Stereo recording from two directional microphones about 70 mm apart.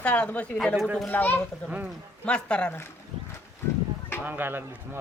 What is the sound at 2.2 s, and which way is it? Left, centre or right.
Speech, centre.